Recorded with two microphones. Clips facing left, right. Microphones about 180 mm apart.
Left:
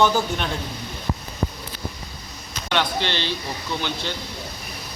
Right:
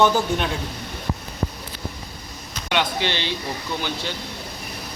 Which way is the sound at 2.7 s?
15° right (ahead or behind).